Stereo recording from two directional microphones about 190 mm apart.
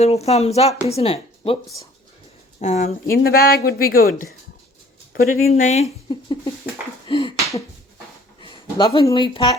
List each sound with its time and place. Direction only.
0.0 s speech: 35° left (ahead or behind)
2.6 s speech: 35° left (ahead or behind)
6.1 s speech: 20° left (ahead or behind)
7.1 s finger snapping: 25° left (ahead or behind)
8.4 s a sound: 30° left (ahead or behind)
9.0 s speech: 25° left (ahead or behind)